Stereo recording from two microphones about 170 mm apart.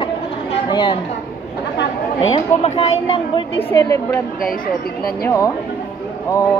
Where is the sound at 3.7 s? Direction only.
20° left (ahead or behind).